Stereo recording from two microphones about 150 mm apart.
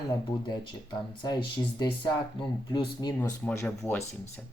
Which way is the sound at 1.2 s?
30° left (ahead or behind).